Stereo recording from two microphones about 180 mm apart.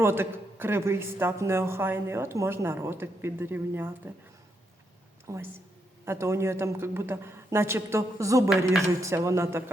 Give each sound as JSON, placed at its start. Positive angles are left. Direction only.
{"t": 0.0, "sound": "a woman's voice", "side_deg": -15}
{"t": 5.2, "sound": "a woman's voice", "side_deg": -15}